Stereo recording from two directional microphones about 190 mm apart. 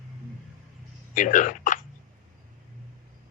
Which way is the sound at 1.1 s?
45° left (ahead or behind).